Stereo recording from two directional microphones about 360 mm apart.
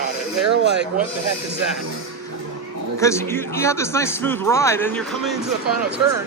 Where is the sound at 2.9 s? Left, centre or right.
Centre.